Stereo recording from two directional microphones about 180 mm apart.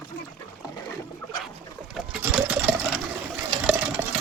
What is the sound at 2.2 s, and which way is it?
Sewing machine, 10° right (ahead or behind).